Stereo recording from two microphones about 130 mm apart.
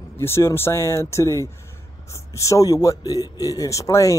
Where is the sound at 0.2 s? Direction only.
20° left (ahead or behind).